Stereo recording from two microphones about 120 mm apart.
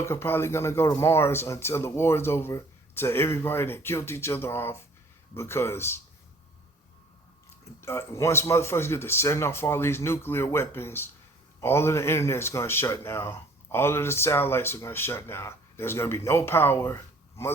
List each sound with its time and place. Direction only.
0.0 s speech: 20° left (ahead or behind)
7.6 s speech: 20° left (ahead or behind)